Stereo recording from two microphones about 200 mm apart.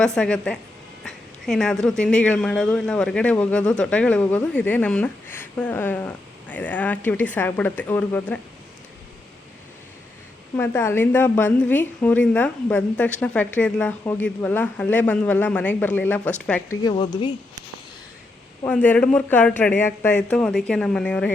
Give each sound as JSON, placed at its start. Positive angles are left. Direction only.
{"t": 0.0, "sound": "speech", "side_deg": 5}
{"t": 10.6, "sound": "speech", "side_deg": 10}
{"t": 16.8, "sound": "speech", "side_deg": 20}
{"t": 18.6, "sound": "speech", "side_deg": 10}